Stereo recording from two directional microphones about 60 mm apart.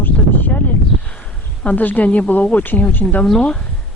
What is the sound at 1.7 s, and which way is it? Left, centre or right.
Speech, left.